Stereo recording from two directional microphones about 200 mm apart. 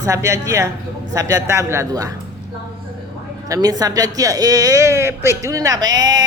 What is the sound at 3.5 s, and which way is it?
A woman's voice, 20° right (ahead or behind).